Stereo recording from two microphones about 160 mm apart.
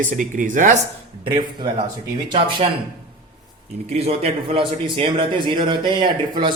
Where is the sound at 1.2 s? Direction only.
30° right (ahead or behind).